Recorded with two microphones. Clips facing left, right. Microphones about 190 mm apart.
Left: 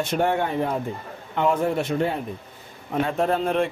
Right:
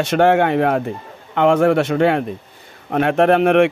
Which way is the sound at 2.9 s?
70° right (ahead or behind).